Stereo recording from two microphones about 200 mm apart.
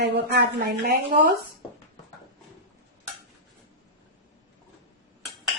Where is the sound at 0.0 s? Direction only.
55° right (ahead or behind).